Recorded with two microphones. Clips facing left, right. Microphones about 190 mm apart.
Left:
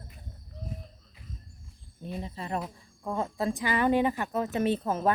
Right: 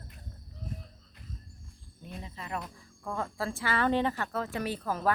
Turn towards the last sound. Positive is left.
turn(degrees=25)  # may be behind; listen again after turning